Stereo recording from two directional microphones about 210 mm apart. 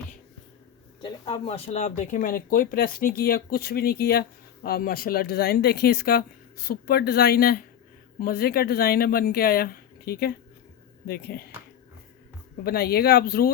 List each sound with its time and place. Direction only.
1.0 s speech: 25° left (ahead or behind); by 11.5 s 50° left (ahead or behind)
12.6 s speech: 50° left (ahead or behind)